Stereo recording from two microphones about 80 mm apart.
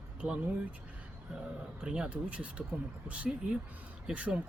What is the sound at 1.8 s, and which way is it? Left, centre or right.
Speech, centre.